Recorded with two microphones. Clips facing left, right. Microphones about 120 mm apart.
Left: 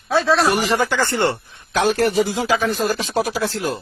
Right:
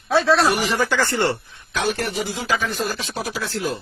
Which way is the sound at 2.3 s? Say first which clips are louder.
Left 5 dB; 35° left (ahead or behind).